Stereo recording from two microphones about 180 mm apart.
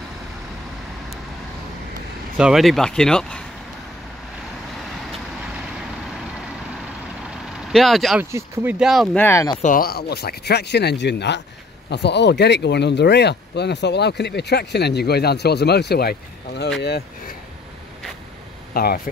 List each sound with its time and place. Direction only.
2.3 s speech: 5° right (ahead or behind)
7.6 s speech: centre (ahead or behind)
8.2 s speech: 15° right (ahead or behind)
8.7 s speech: centre (ahead or behind)
9.2 s speech: 15° left (ahead or behind)
9.6 s speech: 50° left (ahead or behind)
18.7 s speech: 55° left (ahead or behind)